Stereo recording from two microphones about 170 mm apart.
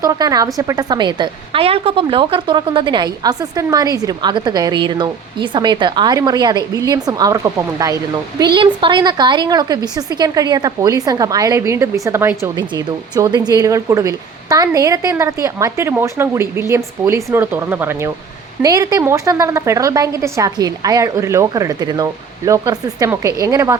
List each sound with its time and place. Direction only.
0.0 s a woman's voice: 20° right (ahead or behind)